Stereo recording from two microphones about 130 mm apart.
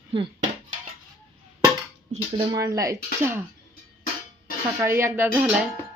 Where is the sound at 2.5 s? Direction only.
25° right (ahead or behind).